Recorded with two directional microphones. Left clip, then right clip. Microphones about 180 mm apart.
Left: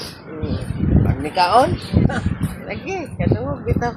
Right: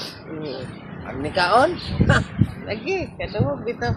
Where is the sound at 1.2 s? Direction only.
25° right (ahead or behind).